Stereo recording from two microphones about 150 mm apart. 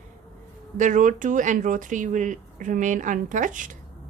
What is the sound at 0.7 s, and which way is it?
Speech, 55° right (ahead or behind).